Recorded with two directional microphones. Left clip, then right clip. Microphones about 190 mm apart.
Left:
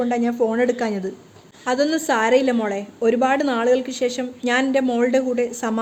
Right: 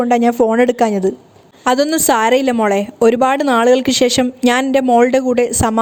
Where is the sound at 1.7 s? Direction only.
55° right (ahead or behind).